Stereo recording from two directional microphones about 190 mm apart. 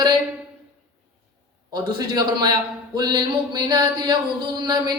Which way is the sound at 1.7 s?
20° right (ahead or behind).